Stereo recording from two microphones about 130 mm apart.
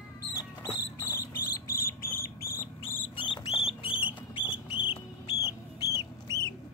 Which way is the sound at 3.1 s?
40° left (ahead or behind).